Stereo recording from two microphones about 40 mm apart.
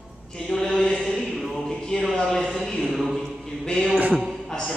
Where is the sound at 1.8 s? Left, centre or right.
Centre.